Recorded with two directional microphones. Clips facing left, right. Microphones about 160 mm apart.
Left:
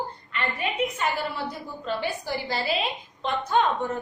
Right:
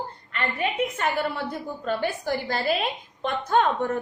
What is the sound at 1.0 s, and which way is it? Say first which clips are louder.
A woman's voice: right 2 dB; 55° right (ahead or behind).